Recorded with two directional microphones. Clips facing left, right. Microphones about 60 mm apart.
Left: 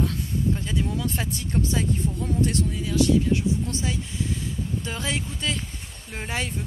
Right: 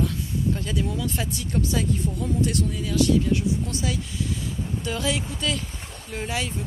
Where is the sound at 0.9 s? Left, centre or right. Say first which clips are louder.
Even; left.